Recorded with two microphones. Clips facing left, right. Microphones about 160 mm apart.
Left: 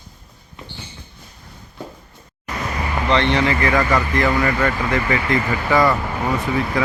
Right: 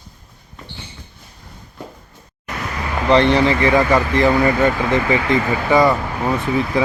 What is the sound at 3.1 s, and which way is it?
Speech, 40° right (ahead or behind).